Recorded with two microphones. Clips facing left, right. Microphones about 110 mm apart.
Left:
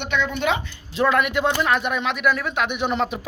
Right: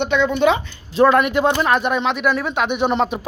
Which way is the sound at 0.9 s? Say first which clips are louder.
Right 6 dB; 40° right (ahead or behind).